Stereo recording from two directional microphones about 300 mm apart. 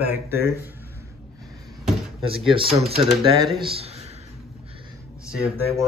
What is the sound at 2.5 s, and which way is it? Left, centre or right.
Speech, centre.